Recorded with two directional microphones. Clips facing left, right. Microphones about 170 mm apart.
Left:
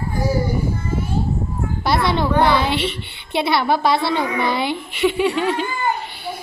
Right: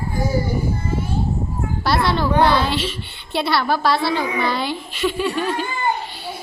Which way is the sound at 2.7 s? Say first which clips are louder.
Left 2 dB; 65° left (ahead or behind).